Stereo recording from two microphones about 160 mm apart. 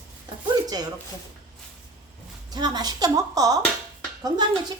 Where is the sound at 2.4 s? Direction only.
25° right (ahead or behind).